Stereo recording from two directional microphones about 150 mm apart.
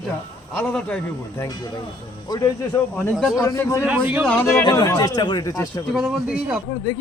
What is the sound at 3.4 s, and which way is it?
Speech, 20° left (ahead or behind).